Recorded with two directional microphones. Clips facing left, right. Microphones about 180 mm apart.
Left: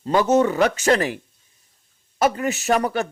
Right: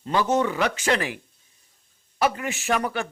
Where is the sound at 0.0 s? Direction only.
45° left (ahead or behind).